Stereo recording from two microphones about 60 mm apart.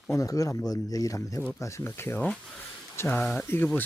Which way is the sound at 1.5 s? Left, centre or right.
Left.